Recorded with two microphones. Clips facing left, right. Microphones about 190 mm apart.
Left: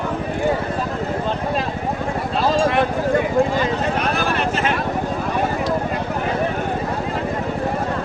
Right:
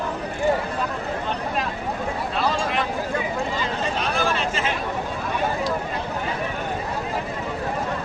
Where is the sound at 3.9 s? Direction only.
60° left (ahead or behind).